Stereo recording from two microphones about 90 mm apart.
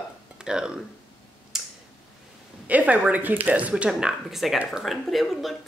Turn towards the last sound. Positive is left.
turn(degrees=0)  # may be behind; listen again after turning